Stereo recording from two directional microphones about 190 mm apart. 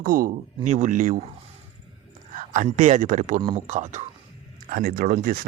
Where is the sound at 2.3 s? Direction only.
40° right (ahead or behind).